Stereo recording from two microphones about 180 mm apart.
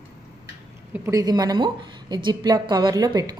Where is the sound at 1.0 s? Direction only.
20° right (ahead or behind).